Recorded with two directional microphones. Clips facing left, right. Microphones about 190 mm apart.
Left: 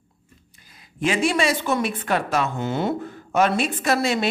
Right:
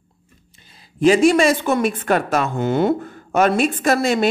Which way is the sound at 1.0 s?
40° right (ahead or behind).